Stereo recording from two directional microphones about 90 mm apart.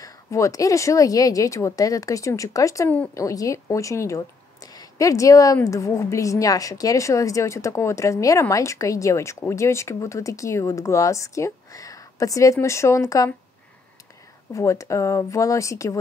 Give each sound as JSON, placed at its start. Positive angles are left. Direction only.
{"t": 0.0, "sound": "a woman's voice", "side_deg": 40}
{"t": 14.5, "sound": "a woman's voice", "side_deg": 35}